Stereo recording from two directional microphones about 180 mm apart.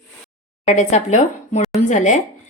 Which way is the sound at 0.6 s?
40° left (ahead or behind).